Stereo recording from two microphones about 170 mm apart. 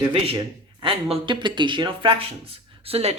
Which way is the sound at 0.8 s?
30° right (ahead or behind).